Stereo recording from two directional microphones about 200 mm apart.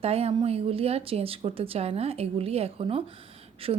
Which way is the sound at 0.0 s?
30° right (ahead or behind).